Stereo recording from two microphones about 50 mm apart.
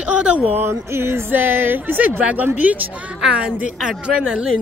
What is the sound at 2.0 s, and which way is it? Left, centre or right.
Speech, right.